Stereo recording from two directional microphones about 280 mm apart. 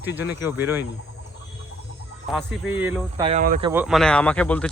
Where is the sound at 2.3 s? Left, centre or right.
Centre.